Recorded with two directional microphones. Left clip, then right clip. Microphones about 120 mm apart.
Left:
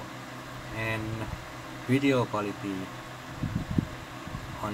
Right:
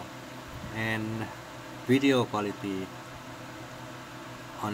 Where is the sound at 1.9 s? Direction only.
40° right (ahead or behind).